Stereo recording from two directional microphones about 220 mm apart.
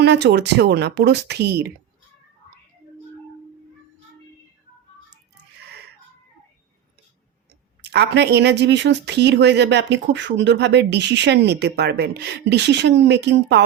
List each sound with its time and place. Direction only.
0.0 s speech: 50° right (ahead or behind)
7.8 s speech: 50° right (ahead or behind)